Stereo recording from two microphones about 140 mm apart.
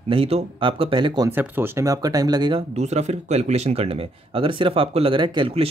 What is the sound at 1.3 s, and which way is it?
Speech, 15° right (ahead or behind).